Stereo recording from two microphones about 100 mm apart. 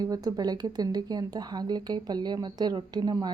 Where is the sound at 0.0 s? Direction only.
40° right (ahead or behind).